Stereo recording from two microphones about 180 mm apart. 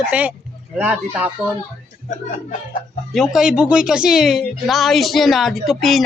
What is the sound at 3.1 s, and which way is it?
Speech, 5° right (ahead or behind).